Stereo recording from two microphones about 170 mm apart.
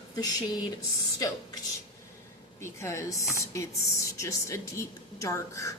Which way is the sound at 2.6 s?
15° left (ahead or behind).